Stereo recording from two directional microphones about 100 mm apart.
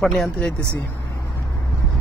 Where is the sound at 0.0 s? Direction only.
5° left (ahead or behind).